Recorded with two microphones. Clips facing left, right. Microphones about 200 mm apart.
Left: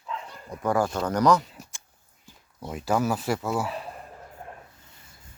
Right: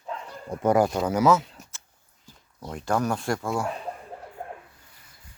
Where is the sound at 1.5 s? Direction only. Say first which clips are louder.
Left 2 dB; 10° left (ahead or behind).